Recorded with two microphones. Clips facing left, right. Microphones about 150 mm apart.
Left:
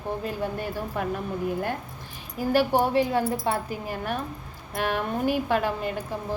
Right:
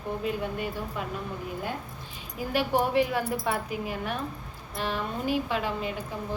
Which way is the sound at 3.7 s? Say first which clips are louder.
Left 1 dB; 45° left (ahead or behind).